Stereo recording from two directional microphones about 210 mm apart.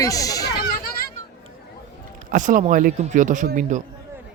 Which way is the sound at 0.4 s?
45° left (ahead or behind).